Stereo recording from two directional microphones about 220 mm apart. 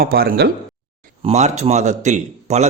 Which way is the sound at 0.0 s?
40° right (ahead or behind).